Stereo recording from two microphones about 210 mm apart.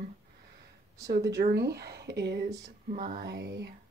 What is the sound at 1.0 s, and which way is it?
Speech, 50° right (ahead or behind).